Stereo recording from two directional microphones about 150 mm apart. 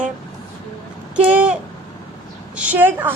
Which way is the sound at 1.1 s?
10° right (ahead or behind).